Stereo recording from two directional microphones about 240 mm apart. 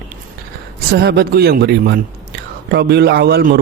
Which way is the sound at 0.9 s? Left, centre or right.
Right.